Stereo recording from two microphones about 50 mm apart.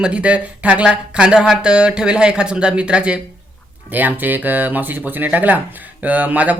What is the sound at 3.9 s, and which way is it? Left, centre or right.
Speech, right.